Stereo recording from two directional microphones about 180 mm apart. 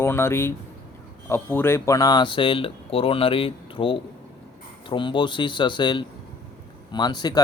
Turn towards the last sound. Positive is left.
turn(degrees=25)  # may be behind; listen again after turning